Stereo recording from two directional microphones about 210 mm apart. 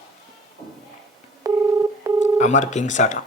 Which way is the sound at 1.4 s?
15° right (ahead or behind).